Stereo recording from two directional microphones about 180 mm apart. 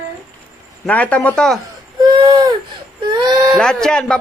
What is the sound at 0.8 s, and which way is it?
Speech, 10° left (ahead or behind).